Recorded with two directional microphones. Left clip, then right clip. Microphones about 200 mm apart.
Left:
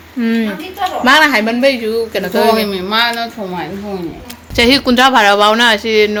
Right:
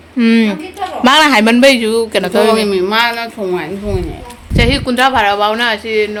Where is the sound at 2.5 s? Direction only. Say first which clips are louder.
Right 2 dB; 55° right (ahead or behind).